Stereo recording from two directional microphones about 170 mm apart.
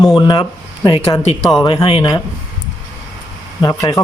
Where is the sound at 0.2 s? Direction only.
25° left (ahead or behind).